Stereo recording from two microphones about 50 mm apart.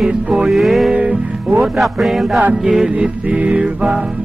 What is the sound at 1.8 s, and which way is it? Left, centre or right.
Music, centre.